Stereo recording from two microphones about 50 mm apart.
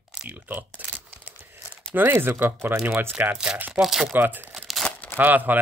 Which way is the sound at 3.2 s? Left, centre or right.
Right.